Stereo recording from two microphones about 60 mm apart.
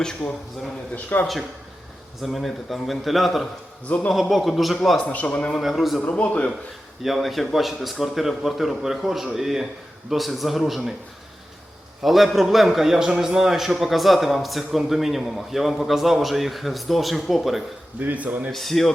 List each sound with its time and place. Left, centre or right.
0.0 s a man's voice: centre
0.9 s a man's voice: left
2.2 s a man's voice: centre
3.8 s a man's voice: left
4.1 s a man's voice: centre
4.9 s a man's voice: left
5.5 s a man's voice: centre
6.0 s a man's voice: left
7.0 s a man's voice: centre
12.0 s a man's voice: centre
18.0 s a man's voice: right
18.5 s a man's voice: centre